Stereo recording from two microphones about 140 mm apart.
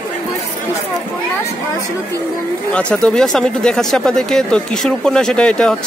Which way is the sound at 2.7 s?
5° left (ahead or behind).